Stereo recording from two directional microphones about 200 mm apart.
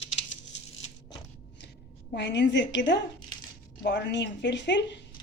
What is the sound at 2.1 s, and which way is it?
A woman's voice, 60° left (ahead or behind).